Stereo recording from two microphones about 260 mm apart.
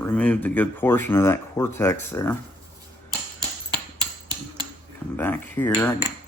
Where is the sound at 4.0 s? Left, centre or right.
Centre.